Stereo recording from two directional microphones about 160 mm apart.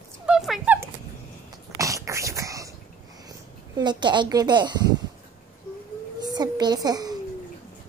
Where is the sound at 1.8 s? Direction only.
20° right (ahead or behind).